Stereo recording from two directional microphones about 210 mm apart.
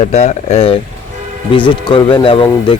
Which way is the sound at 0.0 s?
30° left (ahead or behind).